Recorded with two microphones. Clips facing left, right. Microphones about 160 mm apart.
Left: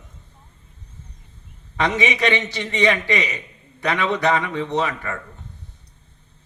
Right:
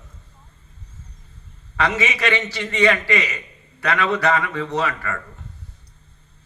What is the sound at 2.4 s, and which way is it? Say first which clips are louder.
A man's voice: right 1 dB; 20° left (ahead or behind).